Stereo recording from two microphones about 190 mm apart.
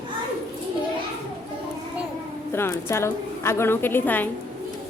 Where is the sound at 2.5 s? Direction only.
10° left (ahead or behind).